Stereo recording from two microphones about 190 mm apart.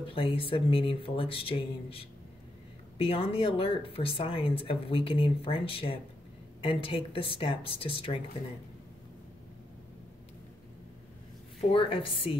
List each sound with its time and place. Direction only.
0.1 s speech: 30° left (ahead or behind)
11.7 s speech: 30° left (ahead or behind)